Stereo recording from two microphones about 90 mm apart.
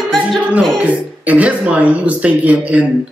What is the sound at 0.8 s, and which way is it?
Speech, 15° right (ahead or behind).